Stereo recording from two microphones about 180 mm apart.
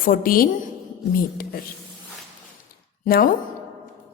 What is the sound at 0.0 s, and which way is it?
Speech, 50° left (ahead or behind).